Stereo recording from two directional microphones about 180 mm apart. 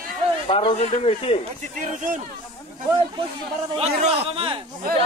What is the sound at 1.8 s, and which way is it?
Speech, 45° right (ahead or behind).